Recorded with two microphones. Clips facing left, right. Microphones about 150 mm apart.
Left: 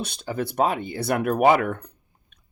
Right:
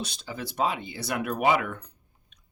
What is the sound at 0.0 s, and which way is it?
Speech, 55° left (ahead or behind).